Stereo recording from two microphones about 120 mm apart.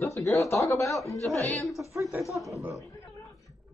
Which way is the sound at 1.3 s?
25° right (ahead or behind).